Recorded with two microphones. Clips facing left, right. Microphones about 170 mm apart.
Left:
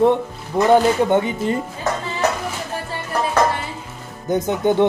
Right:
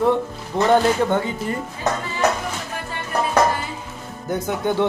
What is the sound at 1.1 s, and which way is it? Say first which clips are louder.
Speech: left 4 dB; 20° left (ahead or behind).